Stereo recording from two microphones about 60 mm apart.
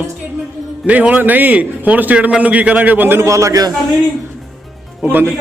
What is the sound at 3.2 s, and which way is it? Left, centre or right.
Speech, right.